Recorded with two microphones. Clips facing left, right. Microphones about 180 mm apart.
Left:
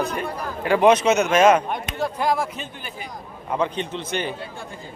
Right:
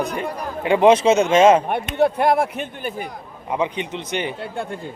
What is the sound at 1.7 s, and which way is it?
Speech, 60° right (ahead or behind).